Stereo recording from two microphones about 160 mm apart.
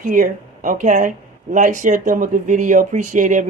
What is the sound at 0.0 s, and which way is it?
Speech, 55° right (ahead or behind).